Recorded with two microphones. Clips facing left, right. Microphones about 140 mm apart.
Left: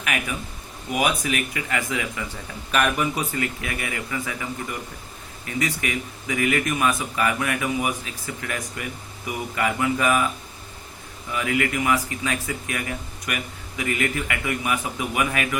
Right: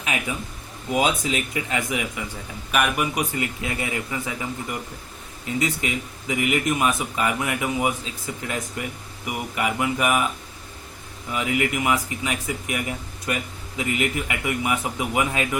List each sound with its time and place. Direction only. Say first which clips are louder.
0.0 s speech: even; 20° right (ahead or behind)
5.5 s speech: right 1 dB; 20° right (ahead or behind)
11.3 s speech: even; 20° right (ahead or behind)